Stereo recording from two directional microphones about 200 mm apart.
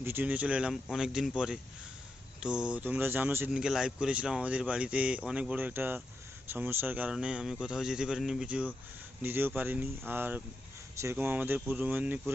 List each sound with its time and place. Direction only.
0.0 s speech: 10° right (ahead or behind)